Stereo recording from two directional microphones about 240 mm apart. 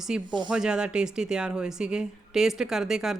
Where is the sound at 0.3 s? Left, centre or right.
Centre.